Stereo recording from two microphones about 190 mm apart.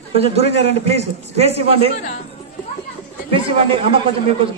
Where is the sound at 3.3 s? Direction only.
30° right (ahead or behind).